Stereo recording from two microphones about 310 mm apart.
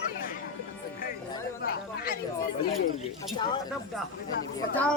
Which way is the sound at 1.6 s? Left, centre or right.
Left.